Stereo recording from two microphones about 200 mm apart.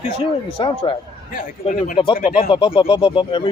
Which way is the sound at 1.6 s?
40° left (ahead or behind).